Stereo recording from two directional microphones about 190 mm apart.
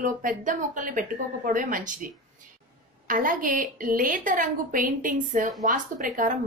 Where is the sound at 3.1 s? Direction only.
45° right (ahead or behind).